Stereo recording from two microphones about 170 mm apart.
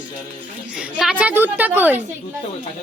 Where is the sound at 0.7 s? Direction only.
5° right (ahead or behind).